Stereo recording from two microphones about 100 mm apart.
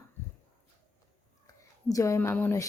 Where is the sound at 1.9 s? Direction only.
35° left (ahead or behind).